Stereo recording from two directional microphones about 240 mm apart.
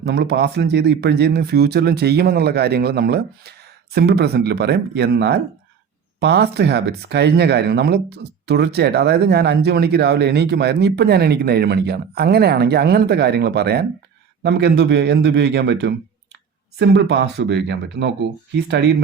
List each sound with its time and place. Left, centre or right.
0.0 s speech: right